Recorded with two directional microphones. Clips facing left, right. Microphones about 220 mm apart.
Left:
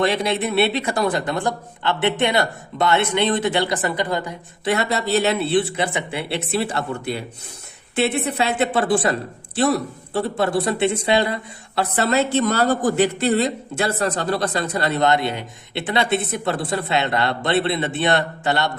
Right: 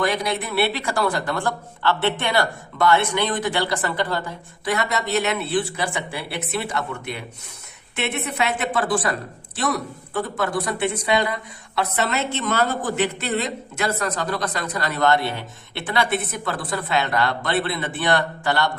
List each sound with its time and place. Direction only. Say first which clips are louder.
0.0 s speech: left 3 dB; 25° left (ahead or behind)